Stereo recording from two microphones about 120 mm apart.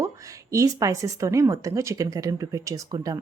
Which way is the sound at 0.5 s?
25° right (ahead or behind).